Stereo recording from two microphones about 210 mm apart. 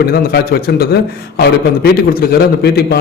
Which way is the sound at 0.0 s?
50° left (ahead or behind).